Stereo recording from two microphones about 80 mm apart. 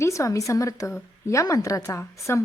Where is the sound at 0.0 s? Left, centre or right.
Left.